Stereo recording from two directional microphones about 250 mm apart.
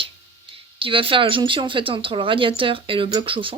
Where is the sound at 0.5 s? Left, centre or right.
Right.